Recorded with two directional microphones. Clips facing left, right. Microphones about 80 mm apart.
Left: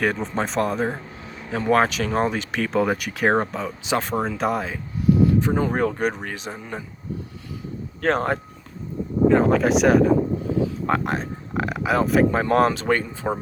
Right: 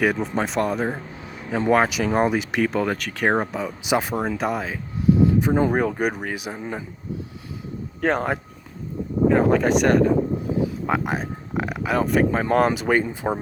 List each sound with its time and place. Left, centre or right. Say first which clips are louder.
0.0 s speech: right 2 dB; centre
2.7 s speech: left 2 dB; centre
5.2 s a sound: right 1 dB; centre
5.8 s speech: even; centre
8.0 s speech: left 1 dB; centre